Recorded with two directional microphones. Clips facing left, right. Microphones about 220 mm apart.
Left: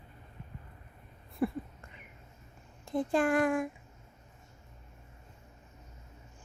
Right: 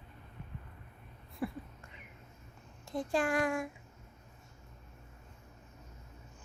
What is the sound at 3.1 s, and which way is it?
Speech, 55° left (ahead or behind).